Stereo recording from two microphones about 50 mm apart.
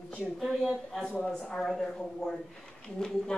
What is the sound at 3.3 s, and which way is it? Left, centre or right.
Speech, centre.